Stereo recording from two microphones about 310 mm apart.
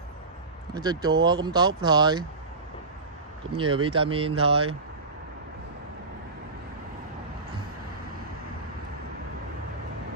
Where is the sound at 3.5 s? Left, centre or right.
Centre.